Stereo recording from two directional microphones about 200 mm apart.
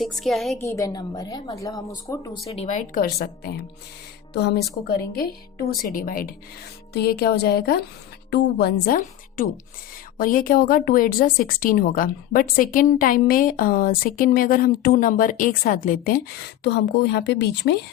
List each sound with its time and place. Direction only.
0.0 s speech: centre (ahead or behind)
0.6 s a woman's voice: 15° left (ahead or behind)
2.5 s a woman's voice: 35° left (ahead or behind)
16.6 s speech: 60° left (ahead or behind)